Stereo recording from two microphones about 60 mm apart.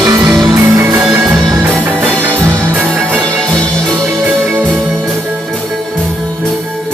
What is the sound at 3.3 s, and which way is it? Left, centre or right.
Music, centre.